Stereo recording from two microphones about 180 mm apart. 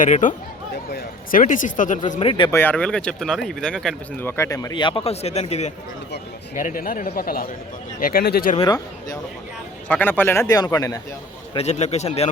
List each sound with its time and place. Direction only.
0.0 s a man's voice: 45° left (ahead or behind)
2.5 s speech: 10° left (ahead or behind)
4.3 s speech: 15° left (ahead or behind); by 5.7 s 35° left (ahead or behind)
6.6 s speech: 50° left (ahead or behind)
9.9 s a man's voice: 10° left (ahead or behind)
11.5 s a man's voice: 40° left (ahead or behind)